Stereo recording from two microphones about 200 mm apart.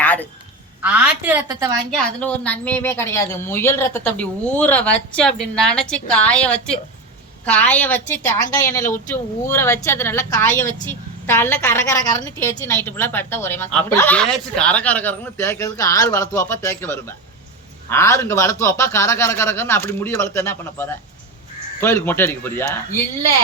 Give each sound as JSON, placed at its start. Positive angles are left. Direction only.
{"t": 0.0, "sound": "a sound", "side_deg": 10}
{"t": 0.8, "sound": "a woman's voice", "side_deg": -5}
{"t": 2.0, "sound": "speech", "side_deg": 5}
{"t": 10.5, "sound": "a woman's voice", "side_deg": 40}
{"t": 10.8, "sound": "speech", "side_deg": 10}